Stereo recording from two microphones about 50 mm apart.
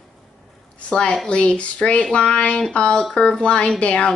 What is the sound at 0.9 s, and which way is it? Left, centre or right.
A woman's voice, left.